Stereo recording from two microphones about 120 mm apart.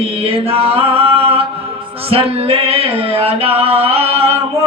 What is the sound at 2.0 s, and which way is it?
Music, 55° right (ahead or behind).